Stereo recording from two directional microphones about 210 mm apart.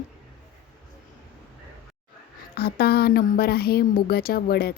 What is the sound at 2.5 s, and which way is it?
A woman's voice, 45° left (ahead or behind).